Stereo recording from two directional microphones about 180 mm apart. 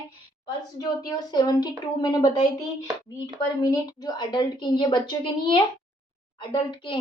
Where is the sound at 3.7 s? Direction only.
20° left (ahead or behind).